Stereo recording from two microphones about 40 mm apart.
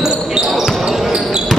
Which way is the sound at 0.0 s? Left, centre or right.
Centre.